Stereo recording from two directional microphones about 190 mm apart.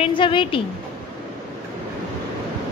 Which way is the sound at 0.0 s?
25° left (ahead or behind).